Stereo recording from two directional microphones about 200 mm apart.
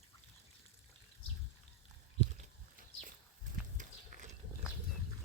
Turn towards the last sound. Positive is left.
turn(degrees=-40)  # may be behind; listen again after turning